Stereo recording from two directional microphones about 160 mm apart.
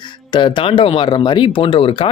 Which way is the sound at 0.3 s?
30° left (ahead or behind).